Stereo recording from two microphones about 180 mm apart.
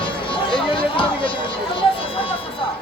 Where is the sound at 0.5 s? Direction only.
30° left (ahead or behind).